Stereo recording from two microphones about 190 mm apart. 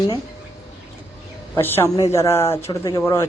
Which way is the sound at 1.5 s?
10° left (ahead or behind).